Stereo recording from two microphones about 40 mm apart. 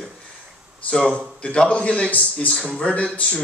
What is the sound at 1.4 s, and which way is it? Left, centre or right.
A man's voice, left.